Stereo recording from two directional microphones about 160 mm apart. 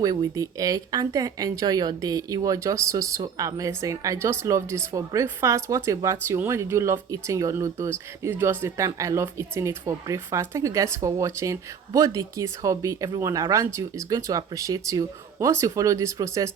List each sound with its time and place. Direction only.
0.0 s speech: 25° right (ahead or behind)